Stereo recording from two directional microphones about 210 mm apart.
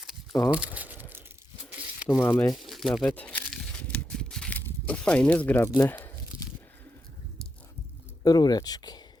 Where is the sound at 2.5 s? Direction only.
Centre (ahead or behind).